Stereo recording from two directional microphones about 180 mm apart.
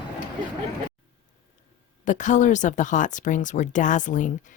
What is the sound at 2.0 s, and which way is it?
Speech, 45° left (ahead or behind).